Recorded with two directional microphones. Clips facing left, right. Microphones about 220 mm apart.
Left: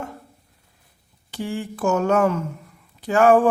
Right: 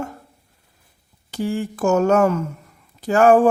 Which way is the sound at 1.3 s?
40° right (ahead or behind).